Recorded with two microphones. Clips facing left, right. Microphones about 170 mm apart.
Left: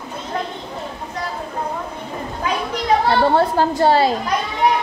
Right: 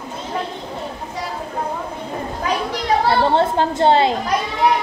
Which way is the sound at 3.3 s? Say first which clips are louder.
Left 1 dB; 25° right (ahead or behind).